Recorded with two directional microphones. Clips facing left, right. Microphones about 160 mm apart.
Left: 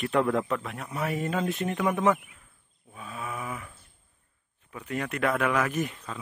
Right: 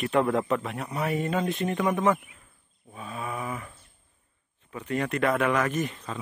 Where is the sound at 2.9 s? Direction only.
Centre (ahead or behind).